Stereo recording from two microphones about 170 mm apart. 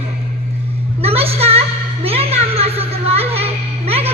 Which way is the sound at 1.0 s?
35° right (ahead or behind).